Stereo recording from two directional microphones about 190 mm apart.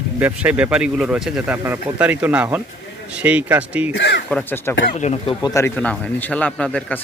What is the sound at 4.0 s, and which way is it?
Speech, 65° left (ahead or behind).